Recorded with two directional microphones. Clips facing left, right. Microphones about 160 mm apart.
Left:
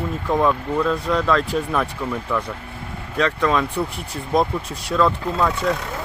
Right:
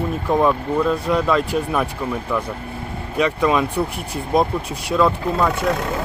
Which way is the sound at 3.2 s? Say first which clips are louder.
Right 2 dB; 10° right (ahead or behind).